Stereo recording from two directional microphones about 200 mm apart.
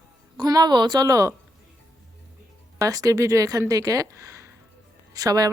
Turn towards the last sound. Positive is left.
turn(degrees=-15)  # may be behind; listen again after turning